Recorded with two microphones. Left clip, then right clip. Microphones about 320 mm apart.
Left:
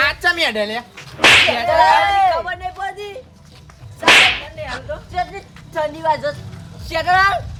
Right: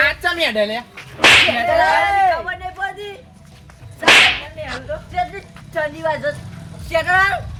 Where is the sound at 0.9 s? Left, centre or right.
Centre.